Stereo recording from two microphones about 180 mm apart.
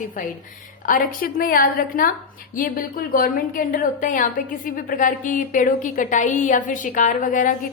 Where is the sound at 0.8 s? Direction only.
50° left (ahead or behind).